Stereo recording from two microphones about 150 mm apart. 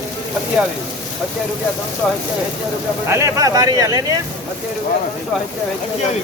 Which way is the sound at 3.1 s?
20° right (ahead or behind).